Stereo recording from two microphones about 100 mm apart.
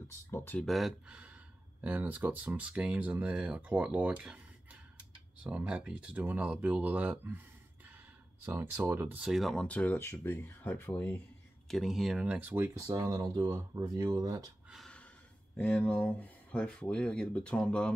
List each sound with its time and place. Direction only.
0.3 s speech: 20° left (ahead or behind)
0.7 s speech: centre (ahead or behind)
1.0 s speech: 10° right (ahead or behind)
5.4 s speech: 10° right (ahead or behind)
8.5 s speech: 25° right (ahead or behind)
9.2 s speech: centre (ahead or behind); by 11.1 s 20° left (ahead or behind)
11.6 s speech: centre (ahead or behind); by 12.6 s 15° right (ahead or behind)
12.9 s speech: 40° right (ahead or behind)
15.5 s speech: 10° left (ahead or behind)